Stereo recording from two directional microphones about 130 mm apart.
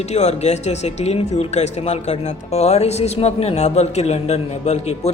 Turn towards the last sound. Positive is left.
turn(degrees=55)  # may be behind; listen again after turning